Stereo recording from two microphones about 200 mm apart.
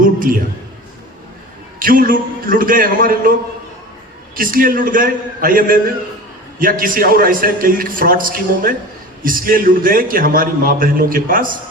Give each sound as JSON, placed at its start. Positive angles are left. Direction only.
{"t": 0.0, "sound": "a sound", "side_deg": -45}
{"t": 1.8, "sound": "a man's voice", "side_deg": -45}
{"t": 4.4, "sound": "a man's voice", "side_deg": -45}